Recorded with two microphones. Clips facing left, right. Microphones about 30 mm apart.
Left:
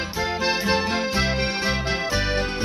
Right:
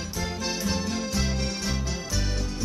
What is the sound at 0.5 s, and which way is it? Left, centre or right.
Music, left.